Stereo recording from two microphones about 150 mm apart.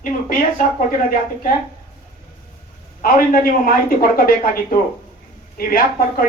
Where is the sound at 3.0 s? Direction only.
70° left (ahead or behind).